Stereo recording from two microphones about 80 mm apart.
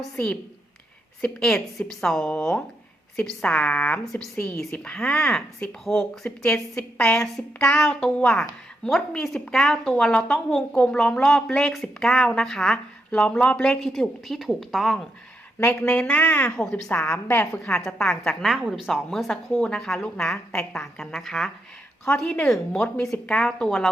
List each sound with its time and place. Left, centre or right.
1.2 s speech: centre
15.7 s speech: centre
17.2 s a woman's voice: left
17.5 s speech: centre